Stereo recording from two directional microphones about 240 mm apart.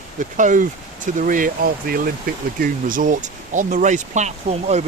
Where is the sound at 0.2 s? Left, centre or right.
Right.